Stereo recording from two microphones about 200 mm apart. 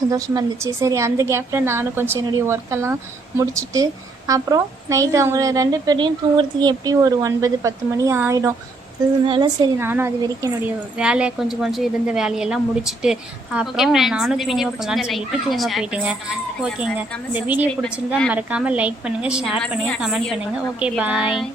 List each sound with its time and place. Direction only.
0.1 s a woman's voice: 15° right (ahead or behind)
9.2 s a woman's voice: 25° right (ahead or behind); by 16.1 s 5° right (ahead or behind)
17.3 s a woman's voice: 10° right (ahead or behind)